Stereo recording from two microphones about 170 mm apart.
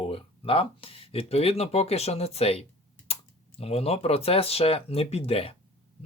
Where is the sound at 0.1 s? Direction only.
35° left (ahead or behind).